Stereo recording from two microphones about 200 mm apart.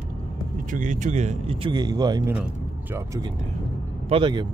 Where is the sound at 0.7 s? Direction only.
40° right (ahead or behind); by 2.3 s 20° right (ahead or behind).